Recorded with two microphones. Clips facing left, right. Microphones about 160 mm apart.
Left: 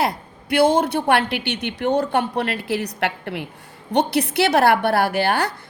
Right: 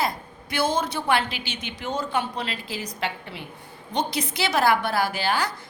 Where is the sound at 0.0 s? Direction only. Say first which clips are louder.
Left 5 dB; 65° left (ahead or behind).